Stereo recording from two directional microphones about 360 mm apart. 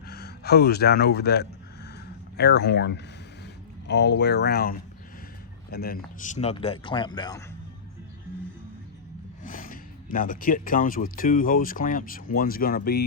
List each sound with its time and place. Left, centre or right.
0.1 s a sound: left
2.3 s speech: left; by 7.4 s centre
9.4 s speech: left